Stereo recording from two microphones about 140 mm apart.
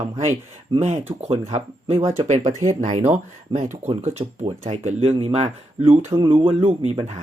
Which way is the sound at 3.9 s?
45° right (ahead or behind).